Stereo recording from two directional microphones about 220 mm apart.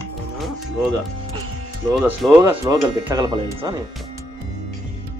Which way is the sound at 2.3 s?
15° right (ahead or behind).